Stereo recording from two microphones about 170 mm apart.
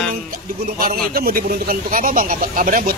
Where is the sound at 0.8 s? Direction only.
60° right (ahead or behind).